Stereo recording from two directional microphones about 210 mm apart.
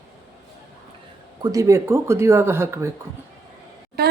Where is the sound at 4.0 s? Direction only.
50° right (ahead or behind).